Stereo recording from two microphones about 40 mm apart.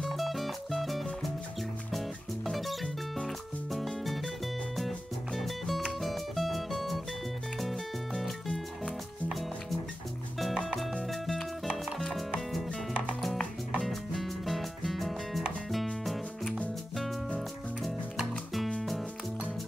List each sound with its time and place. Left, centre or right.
0.1 s music: centre
13.8 s music: centre
18.5 s music: centre